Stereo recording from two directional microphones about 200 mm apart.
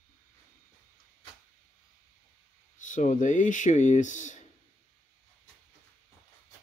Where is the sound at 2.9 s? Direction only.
40° left (ahead or behind).